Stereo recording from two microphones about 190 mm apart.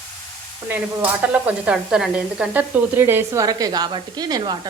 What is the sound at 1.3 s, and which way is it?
Speech, 5° right (ahead or behind).